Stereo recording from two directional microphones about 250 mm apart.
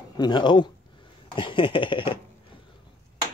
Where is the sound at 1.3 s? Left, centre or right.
Centre.